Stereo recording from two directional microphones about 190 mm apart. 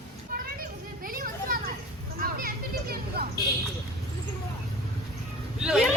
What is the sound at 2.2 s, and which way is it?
Vehicle, 50° right (ahead or behind).